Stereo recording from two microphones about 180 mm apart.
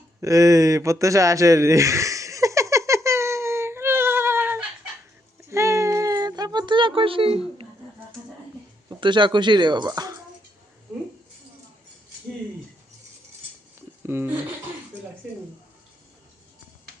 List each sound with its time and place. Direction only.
0.2 s a sound: 20° right (ahead or behind)
8.9 s speech: 25° right (ahead or behind)
14.1 s speech: 10° right (ahead or behind)